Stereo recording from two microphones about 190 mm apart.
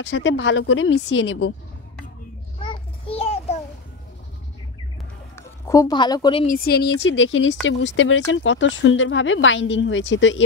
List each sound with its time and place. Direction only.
0.0 s speech: 75° left (ahead or behind)
2.6 s a sound: 25° left (ahead or behind)
5.7 s speech: 20° left (ahead or behind)
6.4 s a woman's voice: 50° left (ahead or behind); by 10.4 s 80° left